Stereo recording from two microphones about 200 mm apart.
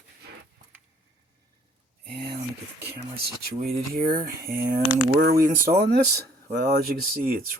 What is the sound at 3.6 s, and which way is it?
Speech, 50° right (ahead or behind).